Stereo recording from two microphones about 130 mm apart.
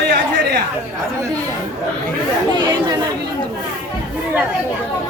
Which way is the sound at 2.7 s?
30° right (ahead or behind).